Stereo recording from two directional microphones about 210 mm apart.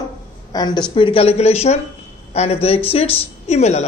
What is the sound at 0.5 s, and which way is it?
A woman's voice, 20° left (ahead or behind).